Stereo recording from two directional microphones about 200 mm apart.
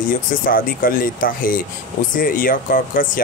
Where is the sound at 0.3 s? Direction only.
45° left (ahead or behind).